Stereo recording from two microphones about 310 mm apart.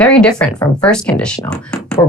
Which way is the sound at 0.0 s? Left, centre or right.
Centre.